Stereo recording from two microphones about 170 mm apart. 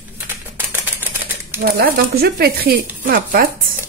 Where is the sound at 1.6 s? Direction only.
65° right (ahead or behind).